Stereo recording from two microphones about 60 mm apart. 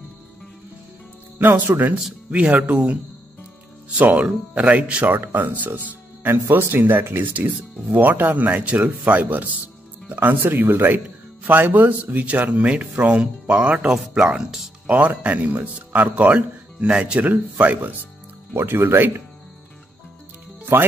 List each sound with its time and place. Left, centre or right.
1.7 s speech: right
4.0 s speech: right
18.5 s speech: right